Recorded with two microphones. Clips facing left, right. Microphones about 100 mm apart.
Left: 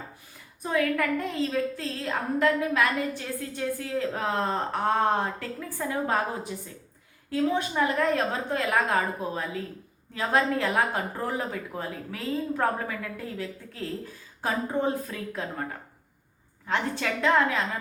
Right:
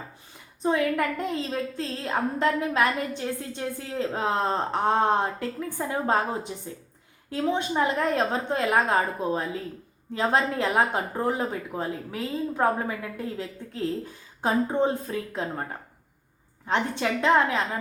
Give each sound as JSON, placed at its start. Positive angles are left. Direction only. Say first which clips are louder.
{"t": 0.6, "sound": "a woman's voice", "louder": "right 2 dB", "side_deg": -25}
{"t": 16.6, "sound": "a woman's voice", "louder": "right 2 dB", "side_deg": -25}